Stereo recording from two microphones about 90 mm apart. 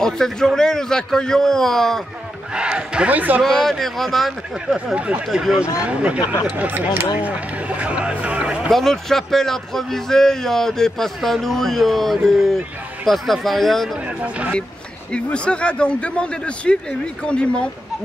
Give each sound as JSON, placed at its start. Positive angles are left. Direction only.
{"t": 0.0, "sound": "a man's voice", "side_deg": 5}
{"t": 2.5, "sound": "speech", "side_deg": -10}
{"t": 3.4, "sound": "a man's voice", "side_deg": 5}
{"t": 4.7, "sound": "speech", "side_deg": -10}
{"t": 8.6, "sound": "a man's voice", "side_deg": 5}
{"t": 14.0, "sound": "speech", "side_deg": -15}
{"t": 15.1, "sound": "speech", "side_deg": 10}